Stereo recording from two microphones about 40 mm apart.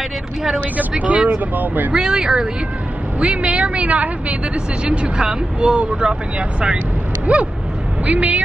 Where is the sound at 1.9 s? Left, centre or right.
Centre.